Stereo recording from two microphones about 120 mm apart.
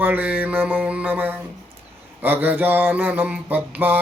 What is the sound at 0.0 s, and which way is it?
Mantra, 15° right (ahead or behind).